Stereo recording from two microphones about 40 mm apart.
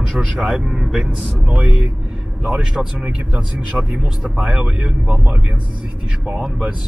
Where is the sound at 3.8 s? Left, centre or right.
Centre.